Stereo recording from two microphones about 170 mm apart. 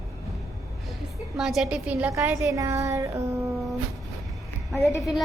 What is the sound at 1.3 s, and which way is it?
A woman's voice, centre (ahead or behind).